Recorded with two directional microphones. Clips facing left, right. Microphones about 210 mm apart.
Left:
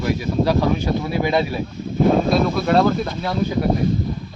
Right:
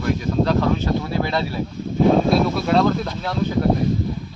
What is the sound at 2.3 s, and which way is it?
Speech, centre (ahead or behind).